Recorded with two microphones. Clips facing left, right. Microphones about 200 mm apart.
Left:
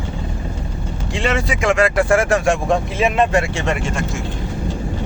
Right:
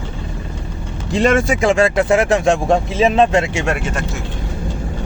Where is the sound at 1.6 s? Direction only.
30° right (ahead or behind).